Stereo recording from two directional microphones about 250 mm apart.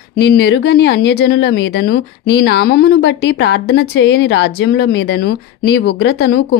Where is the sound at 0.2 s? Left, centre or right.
Left.